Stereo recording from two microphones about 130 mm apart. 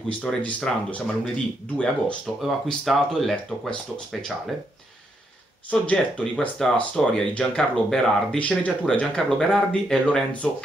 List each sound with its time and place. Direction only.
0.2 s speech: 10° left (ahead or behind)
5.7 s speech: 10° left (ahead or behind)